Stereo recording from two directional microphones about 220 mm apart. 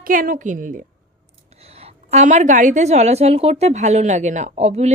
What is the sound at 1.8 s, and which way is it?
Speech, 30° right (ahead or behind).